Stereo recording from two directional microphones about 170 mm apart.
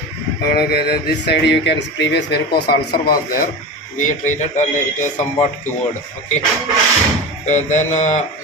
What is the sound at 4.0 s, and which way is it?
Speech, 45° left (ahead or behind).